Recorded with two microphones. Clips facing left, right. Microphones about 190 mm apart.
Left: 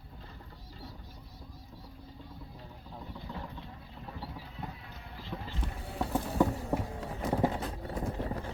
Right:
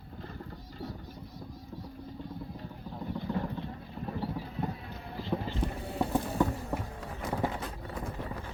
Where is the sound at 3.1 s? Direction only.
55° right (ahead or behind).